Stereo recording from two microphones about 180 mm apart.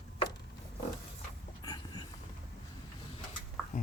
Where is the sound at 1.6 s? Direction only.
25° left (ahead or behind).